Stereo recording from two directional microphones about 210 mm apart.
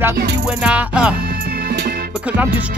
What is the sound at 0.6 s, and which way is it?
Music, 5° right (ahead or behind).